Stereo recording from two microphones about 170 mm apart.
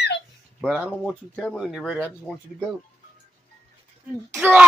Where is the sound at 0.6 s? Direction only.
5° right (ahead or behind).